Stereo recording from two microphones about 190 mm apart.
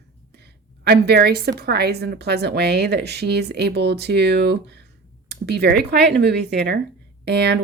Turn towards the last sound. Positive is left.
turn(degrees=-60)  # may be behind; listen again after turning